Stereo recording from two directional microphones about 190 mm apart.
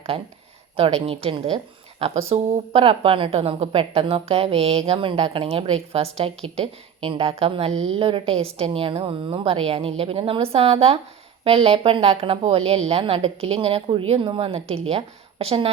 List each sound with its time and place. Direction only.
0.1 s a woman's voice: 30° right (ahead or behind)
7.7 s a woman's voice: 90° right
7.9 s a woman's voice: 30° right (ahead or behind)